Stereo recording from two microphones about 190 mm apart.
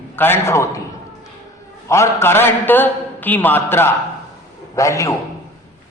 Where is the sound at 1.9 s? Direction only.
15° left (ahead or behind).